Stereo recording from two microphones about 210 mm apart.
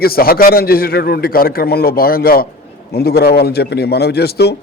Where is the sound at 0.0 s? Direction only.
45° left (ahead or behind).